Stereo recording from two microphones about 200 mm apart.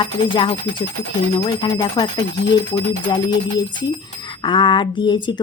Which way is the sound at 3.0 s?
20° left (ahead or behind).